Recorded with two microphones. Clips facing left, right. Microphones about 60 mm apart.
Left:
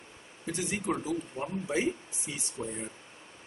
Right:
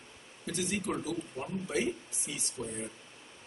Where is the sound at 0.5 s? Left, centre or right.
Left.